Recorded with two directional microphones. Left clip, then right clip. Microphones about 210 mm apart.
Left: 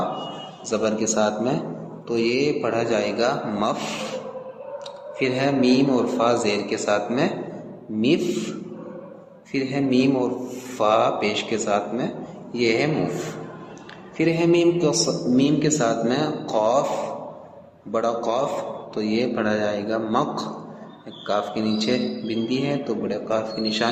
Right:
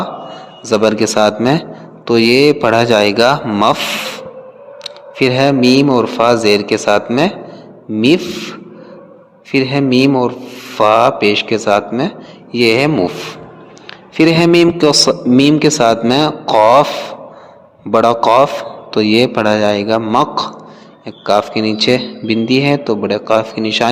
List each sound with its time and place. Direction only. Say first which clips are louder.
0.6 s a man's voice: right 11 dB; 45° right (ahead or behind)
17.9 s a man's voice: right 14 dB; 45° right (ahead or behind)